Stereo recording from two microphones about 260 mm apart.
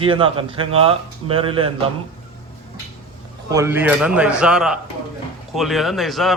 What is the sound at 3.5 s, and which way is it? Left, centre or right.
Speech, centre.